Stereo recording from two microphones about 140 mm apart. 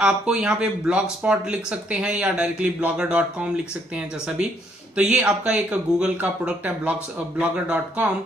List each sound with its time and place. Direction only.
0.0 s speech: 5° right (ahead or behind)
4.9 s speech: 5° right (ahead or behind)